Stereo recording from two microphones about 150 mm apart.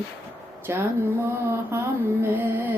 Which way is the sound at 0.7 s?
15° right (ahead or behind).